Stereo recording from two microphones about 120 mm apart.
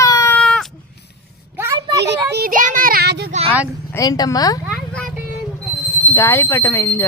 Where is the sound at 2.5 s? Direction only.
90° right.